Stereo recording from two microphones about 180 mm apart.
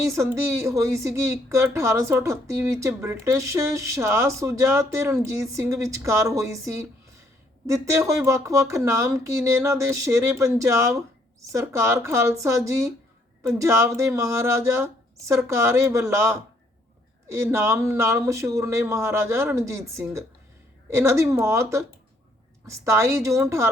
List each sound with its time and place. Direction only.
0.0 s a woman's voice: 15° right (ahead or behind)